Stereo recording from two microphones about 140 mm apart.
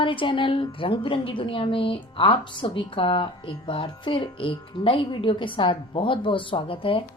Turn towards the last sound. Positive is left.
turn(degrees=40)  # may be behind; listen again after turning